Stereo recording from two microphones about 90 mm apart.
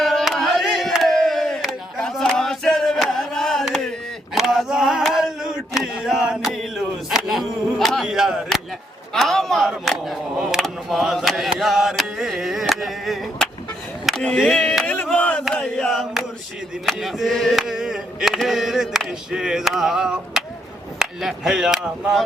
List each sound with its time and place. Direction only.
0.0 s battle cry: centre (ahead or behind)
4.4 s male singing: 5° right (ahead or behind)
9.1 s a sound: 5° left (ahead or behind)
10.6 s carnatic music: centre (ahead or behind)
14.3 s chop: 5° left (ahead or behind)
15.2 s battle cry: 15° left (ahead or behind)
15.6 s chant: 5° left (ahead or behind)
16.8 s a sound: centre (ahead or behind)
21.0 s speech: 5° right (ahead or behind)